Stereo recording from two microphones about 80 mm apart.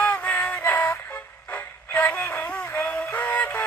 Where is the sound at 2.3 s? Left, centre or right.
Centre.